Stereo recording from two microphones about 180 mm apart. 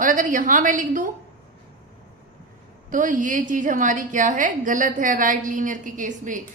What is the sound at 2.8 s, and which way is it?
A woman's voice, 45° right (ahead or behind).